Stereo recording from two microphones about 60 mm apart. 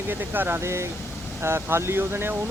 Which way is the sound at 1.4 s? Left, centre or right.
Right.